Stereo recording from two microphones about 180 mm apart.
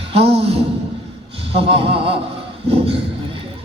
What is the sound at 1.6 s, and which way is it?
Speech, 30° right (ahead or behind).